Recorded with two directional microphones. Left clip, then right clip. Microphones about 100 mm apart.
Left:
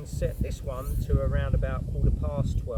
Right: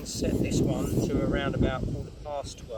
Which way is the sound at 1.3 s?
5° left (ahead or behind).